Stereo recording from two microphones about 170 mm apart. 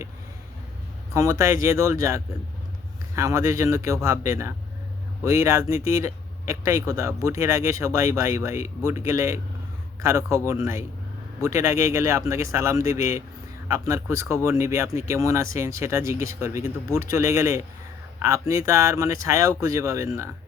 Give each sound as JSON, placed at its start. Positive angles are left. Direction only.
{"t": 1.1, "sound": "speech", "side_deg": -20}